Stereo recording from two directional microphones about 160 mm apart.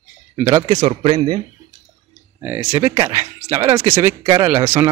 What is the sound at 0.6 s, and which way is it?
Speech, 30° right (ahead or behind).